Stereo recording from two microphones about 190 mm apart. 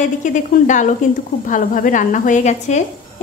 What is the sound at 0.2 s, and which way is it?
A woman's voice, 40° left (ahead or behind).